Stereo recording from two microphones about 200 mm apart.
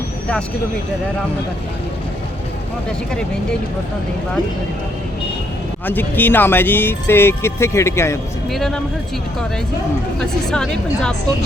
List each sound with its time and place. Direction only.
5.8 s speech: 10° left (ahead or behind)
8.4 s a woman's voice: centre (ahead or behind)
10.2 s a woman's voice: 5° left (ahead or behind)